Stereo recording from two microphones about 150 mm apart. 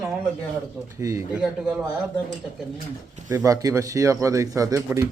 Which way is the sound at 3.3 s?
20° right (ahead or behind).